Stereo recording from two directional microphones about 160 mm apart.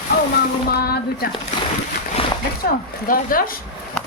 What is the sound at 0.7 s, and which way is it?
Speech, 75° left (ahead or behind).